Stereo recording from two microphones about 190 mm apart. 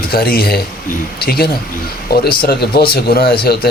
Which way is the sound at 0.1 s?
55° left (ahead or behind).